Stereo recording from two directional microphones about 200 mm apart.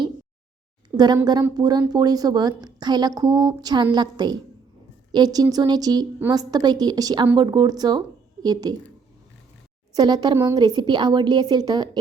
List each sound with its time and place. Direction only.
0.9 s a woman's voice: 20° right (ahead or behind)
9.9 s a woman's voice: 20° right (ahead or behind)